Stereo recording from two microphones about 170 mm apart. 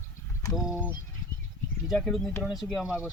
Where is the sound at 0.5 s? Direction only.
Centre (ahead or behind).